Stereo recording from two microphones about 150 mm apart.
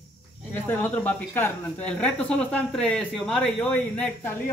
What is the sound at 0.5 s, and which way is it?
Speech, 10° left (ahead or behind).